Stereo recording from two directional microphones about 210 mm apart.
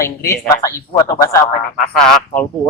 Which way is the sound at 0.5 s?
15° left (ahead or behind).